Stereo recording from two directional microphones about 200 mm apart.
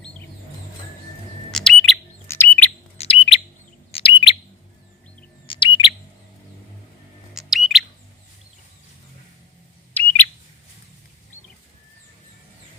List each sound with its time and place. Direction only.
1.5 s a sound: 5° left (ahead or behind)
2.2 s bird: 10° left (ahead or behind)
3.0 s bird: 30° left (ahead or behind)
5.5 s bird: 25° left (ahead or behind)
7.3 s bird: centre (ahead or behind)
10.0 s alarm: 10° left (ahead or behind)